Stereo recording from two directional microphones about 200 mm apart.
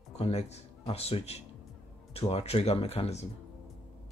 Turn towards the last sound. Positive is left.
turn(degrees=30)  # may be behind; listen again after turning